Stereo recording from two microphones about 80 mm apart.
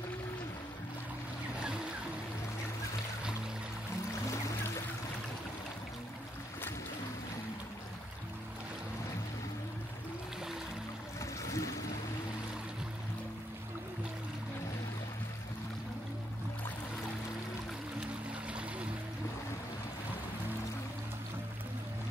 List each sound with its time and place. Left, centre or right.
4.1 s music: left
11.1 s a sound: left
18.0 s music: centre